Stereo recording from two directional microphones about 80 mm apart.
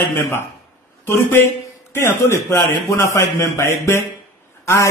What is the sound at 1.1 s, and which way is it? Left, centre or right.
A man's voice, left.